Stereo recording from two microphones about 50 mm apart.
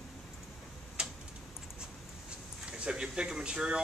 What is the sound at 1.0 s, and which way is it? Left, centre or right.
Tick-tock, centre.